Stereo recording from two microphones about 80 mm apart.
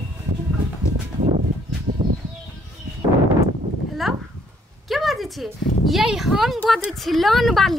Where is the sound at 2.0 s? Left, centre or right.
Right.